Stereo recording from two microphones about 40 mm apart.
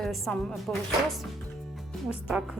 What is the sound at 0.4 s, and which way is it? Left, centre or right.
Speech, centre.